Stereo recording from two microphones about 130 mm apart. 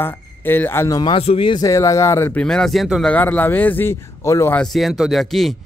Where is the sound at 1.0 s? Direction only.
45° left (ahead or behind).